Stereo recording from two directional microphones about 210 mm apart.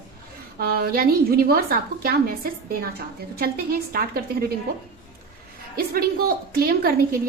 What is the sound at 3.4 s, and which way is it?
A woman's voice, 45° right (ahead or behind).